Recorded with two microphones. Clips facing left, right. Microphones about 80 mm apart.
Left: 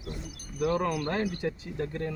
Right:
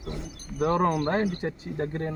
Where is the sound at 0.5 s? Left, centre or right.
Right.